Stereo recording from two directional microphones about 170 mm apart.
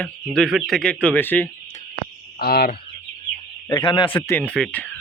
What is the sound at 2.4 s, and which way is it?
Speech, 65° left (ahead or behind).